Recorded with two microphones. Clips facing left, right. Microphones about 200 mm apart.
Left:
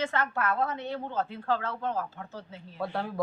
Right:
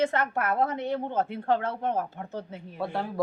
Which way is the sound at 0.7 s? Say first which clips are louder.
Right 4 dB; 15° right (ahead or behind).